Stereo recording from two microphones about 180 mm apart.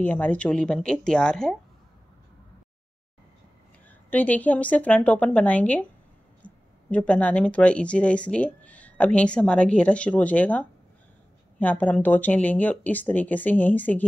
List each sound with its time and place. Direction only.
0.0 s speech: 10° left (ahead or behind)
4.1 s speech: 10° left (ahead or behind)